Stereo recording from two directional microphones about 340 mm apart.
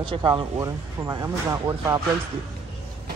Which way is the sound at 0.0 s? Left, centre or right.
Centre.